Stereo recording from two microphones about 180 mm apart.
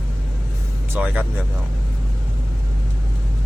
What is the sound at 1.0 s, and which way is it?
Speech, 5° right (ahead or behind).